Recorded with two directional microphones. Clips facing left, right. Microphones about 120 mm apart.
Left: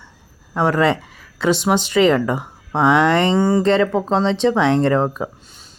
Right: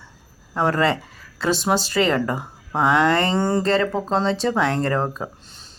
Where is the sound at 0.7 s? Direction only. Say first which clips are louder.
Left 3 dB; 20° left (ahead or behind).